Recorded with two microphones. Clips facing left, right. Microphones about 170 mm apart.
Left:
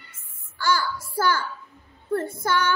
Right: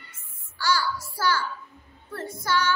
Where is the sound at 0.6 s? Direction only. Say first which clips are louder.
Left 2 dB; 50° left (ahead or behind).